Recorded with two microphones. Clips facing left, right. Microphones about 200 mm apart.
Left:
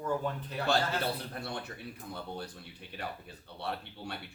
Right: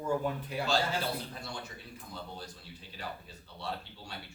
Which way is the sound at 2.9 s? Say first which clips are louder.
Left 2 dB; 60° left (ahead or behind).